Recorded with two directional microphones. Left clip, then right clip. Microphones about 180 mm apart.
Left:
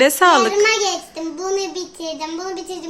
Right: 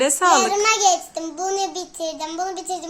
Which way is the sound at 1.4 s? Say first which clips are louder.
Left 1 dB; 15° right (ahead or behind).